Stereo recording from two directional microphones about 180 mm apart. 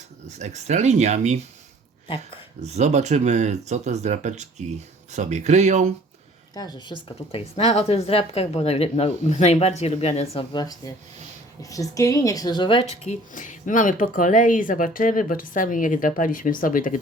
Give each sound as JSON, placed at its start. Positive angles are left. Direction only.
{"t": 0.3, "sound": "speech", "side_deg": -40}
{"t": 2.6, "sound": "speech", "side_deg": -40}
{"t": 6.5, "sound": "speech", "side_deg": 20}
{"t": 10.5, "sound": "a woman's voice", "side_deg": 20}
{"t": 13.1, "sound": "speech", "side_deg": 45}